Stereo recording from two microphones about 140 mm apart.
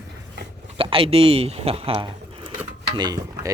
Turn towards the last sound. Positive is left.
turn(degrees=-25)  # may be behind; listen again after turning